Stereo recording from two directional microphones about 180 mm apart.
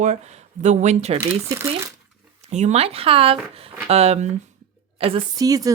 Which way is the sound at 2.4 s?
40° right (ahead or behind).